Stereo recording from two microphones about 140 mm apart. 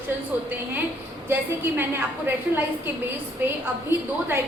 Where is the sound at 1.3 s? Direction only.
15° right (ahead or behind).